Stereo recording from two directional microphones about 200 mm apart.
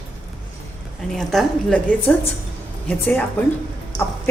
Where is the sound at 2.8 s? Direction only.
10° left (ahead or behind).